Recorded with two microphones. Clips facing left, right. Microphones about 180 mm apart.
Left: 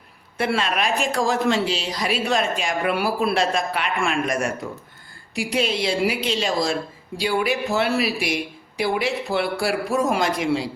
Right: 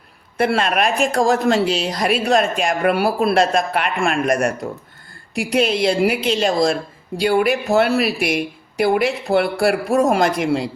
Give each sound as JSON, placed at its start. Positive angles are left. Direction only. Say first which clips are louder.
{"t": 0.3, "sound": "speech", "louder": "right 5 dB", "side_deg": -50}
{"t": 5.4, "sound": "a man's voice", "louder": "right 5 dB", "side_deg": -60}